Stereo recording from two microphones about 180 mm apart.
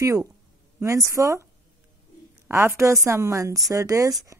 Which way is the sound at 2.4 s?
15° right (ahead or behind).